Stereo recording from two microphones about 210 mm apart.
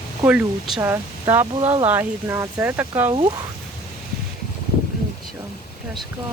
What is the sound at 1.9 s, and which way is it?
Speech, 10° right (ahead or behind).